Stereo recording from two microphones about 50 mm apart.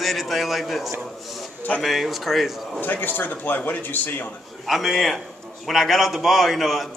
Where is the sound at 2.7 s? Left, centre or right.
Left.